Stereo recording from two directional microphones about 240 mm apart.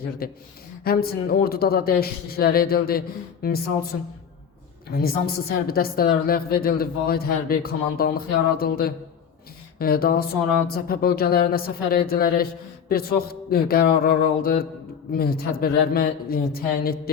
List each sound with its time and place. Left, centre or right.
0.2 s a woman's voice: left
4.9 s a woman's voice: left